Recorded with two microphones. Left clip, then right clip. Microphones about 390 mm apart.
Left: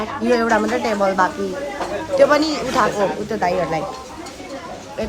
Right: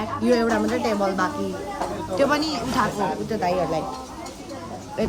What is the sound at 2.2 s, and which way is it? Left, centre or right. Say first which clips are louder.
Speech: left 7 dB; centre.